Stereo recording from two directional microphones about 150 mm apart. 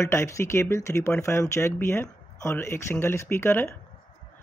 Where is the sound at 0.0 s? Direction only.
20° left (ahead or behind).